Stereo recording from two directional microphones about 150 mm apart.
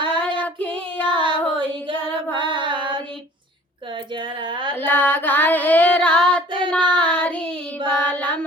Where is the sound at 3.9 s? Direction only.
30° right (ahead or behind).